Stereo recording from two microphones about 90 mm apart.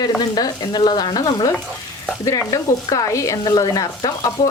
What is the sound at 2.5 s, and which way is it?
Stir, 40° left (ahead or behind).